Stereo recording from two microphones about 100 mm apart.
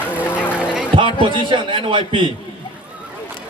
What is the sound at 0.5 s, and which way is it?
Music, 10° right (ahead or behind).